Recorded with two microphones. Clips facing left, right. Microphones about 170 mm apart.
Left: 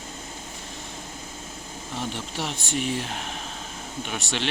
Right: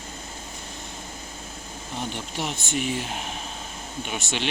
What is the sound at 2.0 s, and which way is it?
Speech, centre (ahead or behind).